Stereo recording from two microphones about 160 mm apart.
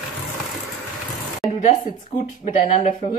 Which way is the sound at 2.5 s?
45° left (ahead or behind).